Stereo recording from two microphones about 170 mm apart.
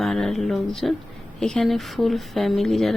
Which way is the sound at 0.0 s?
Centre (ahead or behind).